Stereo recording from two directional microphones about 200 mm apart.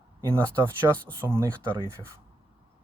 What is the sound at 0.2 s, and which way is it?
Speech, 15° right (ahead or behind).